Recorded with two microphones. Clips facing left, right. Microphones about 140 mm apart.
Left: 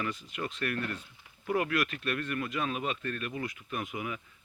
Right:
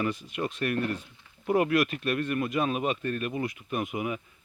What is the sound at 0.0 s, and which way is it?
Speech, 15° right (ahead or behind).